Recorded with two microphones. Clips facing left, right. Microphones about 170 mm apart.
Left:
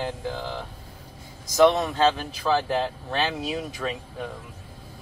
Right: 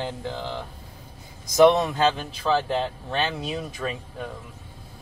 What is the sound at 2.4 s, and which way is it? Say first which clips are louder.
Speech: right 2 dB; 5° left (ahead or behind).